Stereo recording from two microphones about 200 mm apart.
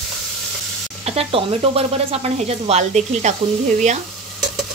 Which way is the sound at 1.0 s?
30° right (ahead or behind).